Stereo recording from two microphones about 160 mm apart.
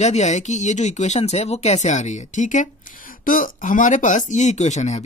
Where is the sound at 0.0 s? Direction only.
45° left (ahead or behind).